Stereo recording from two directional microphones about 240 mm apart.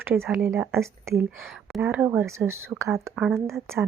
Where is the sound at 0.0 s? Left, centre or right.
Centre.